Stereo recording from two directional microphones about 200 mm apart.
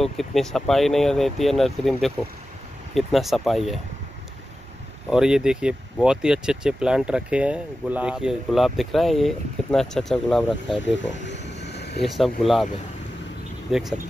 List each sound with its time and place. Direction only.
0.0 s speech: centre (ahead or behind)
5.1 s speech: 5° right (ahead or behind)
11.2 s a sound: 60° left (ahead or behind)
12.0 s speech: centre (ahead or behind)
13.7 s speech: centre (ahead or behind)